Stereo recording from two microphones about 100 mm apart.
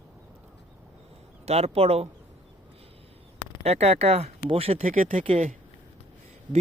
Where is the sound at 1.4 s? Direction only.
90° right.